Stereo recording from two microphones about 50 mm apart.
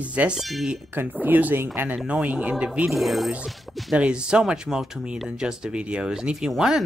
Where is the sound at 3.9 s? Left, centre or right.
Centre.